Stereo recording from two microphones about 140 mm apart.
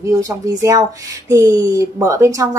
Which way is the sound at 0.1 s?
25° right (ahead or behind).